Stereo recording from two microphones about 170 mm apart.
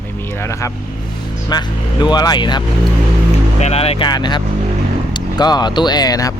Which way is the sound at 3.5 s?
40° left (ahead or behind).